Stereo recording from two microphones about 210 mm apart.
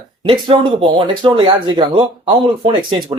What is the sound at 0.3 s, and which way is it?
Speech, 25° right (ahead or behind).